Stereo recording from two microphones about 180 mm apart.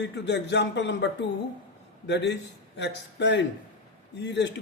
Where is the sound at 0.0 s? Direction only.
75° left (ahead or behind).